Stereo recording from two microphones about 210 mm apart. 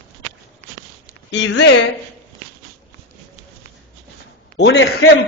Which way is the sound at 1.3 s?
60° left (ahead or behind).